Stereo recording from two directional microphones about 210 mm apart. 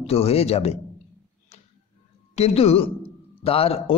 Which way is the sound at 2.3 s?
30° left (ahead or behind).